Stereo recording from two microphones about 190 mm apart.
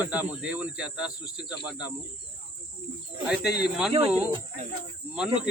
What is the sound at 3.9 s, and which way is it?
Speech, 30° right (ahead or behind).